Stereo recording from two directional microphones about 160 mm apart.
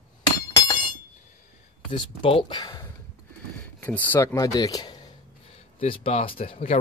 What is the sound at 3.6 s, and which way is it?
Speech, 10° left (ahead or behind).